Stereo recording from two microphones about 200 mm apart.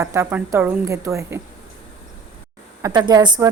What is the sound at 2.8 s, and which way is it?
Speech, 20° right (ahead or behind).